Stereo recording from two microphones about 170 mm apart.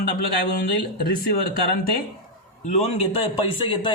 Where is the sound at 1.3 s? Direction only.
60° left (ahead or behind).